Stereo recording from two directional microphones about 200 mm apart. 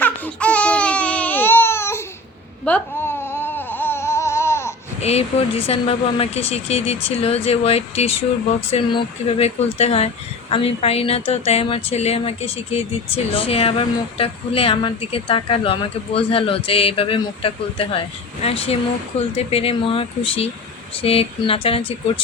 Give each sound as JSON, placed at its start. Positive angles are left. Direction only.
{"t": 0.0, "sound": "baby cry", "side_deg": 5}
{"t": 2.6, "sound": "a sound", "side_deg": 10}
{"t": 4.9, "sound": "speech", "side_deg": 30}